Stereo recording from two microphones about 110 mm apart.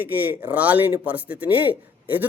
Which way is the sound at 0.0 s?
20° right (ahead or behind).